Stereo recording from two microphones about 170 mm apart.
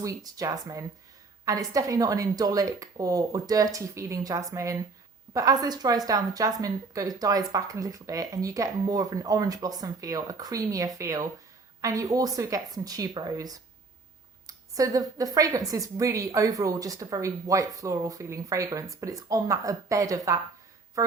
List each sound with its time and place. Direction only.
0.0 s a woman's voice: 20° right (ahead or behind)